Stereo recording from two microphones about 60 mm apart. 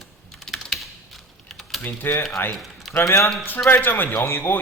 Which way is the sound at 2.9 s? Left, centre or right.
Left.